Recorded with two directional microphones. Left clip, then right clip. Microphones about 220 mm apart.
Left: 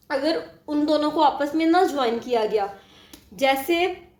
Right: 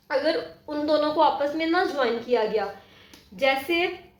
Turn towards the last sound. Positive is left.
turn(degrees=55)  # may be behind; listen again after turning